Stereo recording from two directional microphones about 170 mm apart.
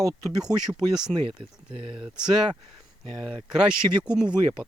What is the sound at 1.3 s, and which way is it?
Speech, 35° right (ahead or behind).